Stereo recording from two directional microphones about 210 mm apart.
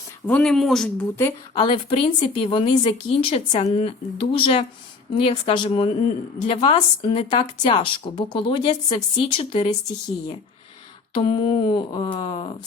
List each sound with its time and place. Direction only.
0.3 s speech: 5° left (ahead or behind)
1.2 s speech: 25° left (ahead or behind)
11.1 s speech: 25° left (ahead or behind)